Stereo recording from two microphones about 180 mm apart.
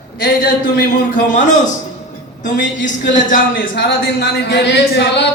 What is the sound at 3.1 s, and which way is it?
Speech, 45° left (ahead or behind).